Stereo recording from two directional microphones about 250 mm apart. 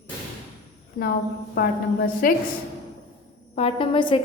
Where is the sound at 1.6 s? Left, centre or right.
Left.